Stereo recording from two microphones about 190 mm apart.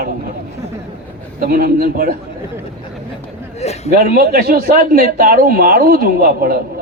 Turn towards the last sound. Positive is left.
turn(degrees=-50)  # may be behind; listen again after turning